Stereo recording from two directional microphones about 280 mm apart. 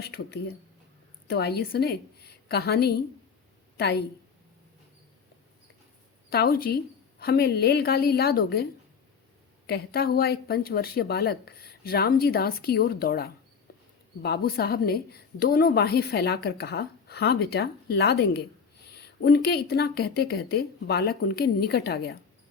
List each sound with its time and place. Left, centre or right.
0.0 s a woman's voice: left
6.3 s a woman's voice: left
9.6 s a woman's voice: left